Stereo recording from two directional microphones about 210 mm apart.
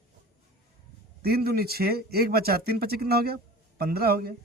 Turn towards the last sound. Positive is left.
turn(degrees=-45)  # may be behind; listen again after turning